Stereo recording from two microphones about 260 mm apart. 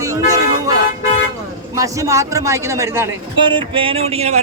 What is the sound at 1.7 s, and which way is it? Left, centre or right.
A man's voice, centre.